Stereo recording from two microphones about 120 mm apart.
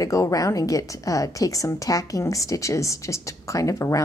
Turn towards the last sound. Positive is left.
turn(degrees=25)  # may be behind; listen again after turning